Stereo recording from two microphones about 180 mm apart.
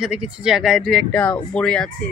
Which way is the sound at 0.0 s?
5° right (ahead or behind).